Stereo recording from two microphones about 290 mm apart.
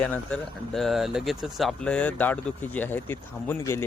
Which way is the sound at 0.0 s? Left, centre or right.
Centre.